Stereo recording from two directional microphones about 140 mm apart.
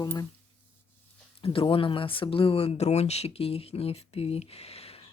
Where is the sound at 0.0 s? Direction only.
30° left (ahead or behind).